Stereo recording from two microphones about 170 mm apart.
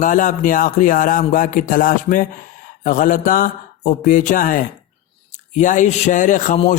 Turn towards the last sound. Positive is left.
turn(degrees=50)  # may be behind; listen again after turning